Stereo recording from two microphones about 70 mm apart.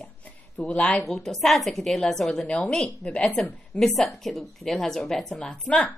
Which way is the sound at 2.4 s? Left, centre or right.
Centre.